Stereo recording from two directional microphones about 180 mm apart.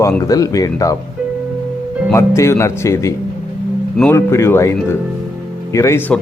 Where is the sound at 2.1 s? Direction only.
15° left (ahead or behind).